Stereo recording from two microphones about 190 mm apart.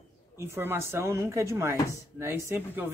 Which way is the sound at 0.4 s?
10° right (ahead or behind).